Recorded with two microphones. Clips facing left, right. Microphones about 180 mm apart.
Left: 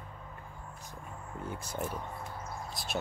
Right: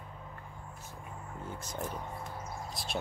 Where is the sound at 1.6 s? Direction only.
5° left (ahead or behind).